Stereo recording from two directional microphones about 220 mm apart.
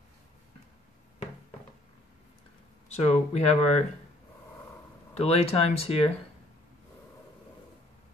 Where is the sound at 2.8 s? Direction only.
30° left (ahead or behind).